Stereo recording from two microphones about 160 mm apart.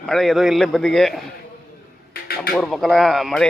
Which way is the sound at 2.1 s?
75° left (ahead or behind).